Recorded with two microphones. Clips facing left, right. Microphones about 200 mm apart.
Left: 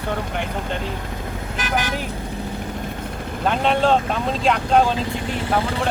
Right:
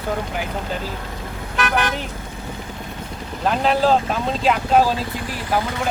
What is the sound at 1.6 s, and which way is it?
Speech, 60° right (ahead or behind).